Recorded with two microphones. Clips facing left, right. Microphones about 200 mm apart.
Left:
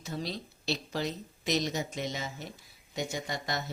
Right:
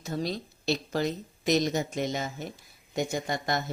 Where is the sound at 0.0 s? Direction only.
45° right (ahead or behind).